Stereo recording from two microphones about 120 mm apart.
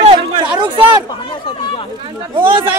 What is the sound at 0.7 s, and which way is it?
Speech, 40° left (ahead or behind).